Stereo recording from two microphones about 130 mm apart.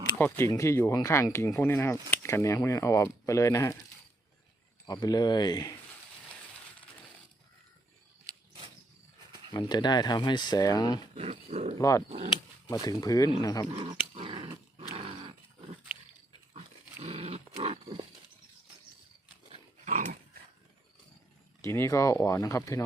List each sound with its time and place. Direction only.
0.3 s speech: 20° left (ahead or behind)
4.9 s speech: 30° left (ahead or behind)
9.5 s speech: 35° left (ahead or behind)
11.1 s speech: 50° right (ahead or behind)
11.8 s speech: 25° left (ahead or behind)
12.0 s speech: 55° right (ahead or behind)
12.6 s speech: 30° left (ahead or behind)
13.7 s speech: 45° right (ahead or behind)
14.1 s dog: 45° right (ahead or behind)
17.0 s dog: 50° right (ahead or behind)
19.8 s dog: 65° right (ahead or behind)
21.6 s speech: 20° left (ahead or behind)